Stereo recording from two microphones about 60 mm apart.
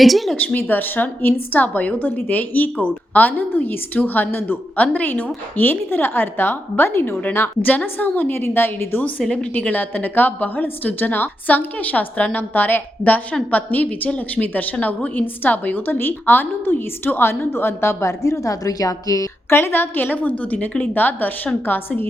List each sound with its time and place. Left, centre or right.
0.0 s a woman's voice: centre
0.3 s a woman's voice: left
19.5 s a woman's voice: left